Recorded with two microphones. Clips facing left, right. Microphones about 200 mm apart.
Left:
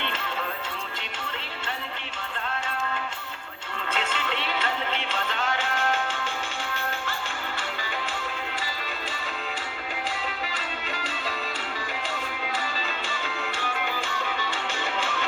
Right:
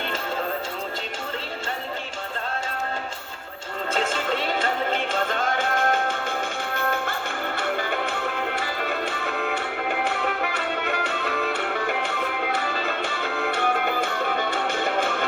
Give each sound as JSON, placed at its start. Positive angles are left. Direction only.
{"t": 3.9, "sound": "music", "side_deg": -45}